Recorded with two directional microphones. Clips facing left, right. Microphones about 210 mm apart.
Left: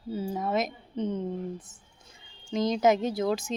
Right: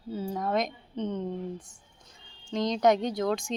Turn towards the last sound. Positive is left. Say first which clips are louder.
# left 1 dB
turn(degrees=5)  # may be behind; listen again after turning